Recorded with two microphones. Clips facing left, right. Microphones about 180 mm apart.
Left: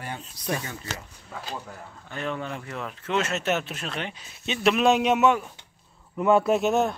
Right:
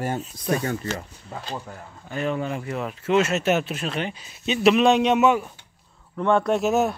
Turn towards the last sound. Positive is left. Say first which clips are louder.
# right 1 dB
turn(degrees=-5)  # may be behind; listen again after turning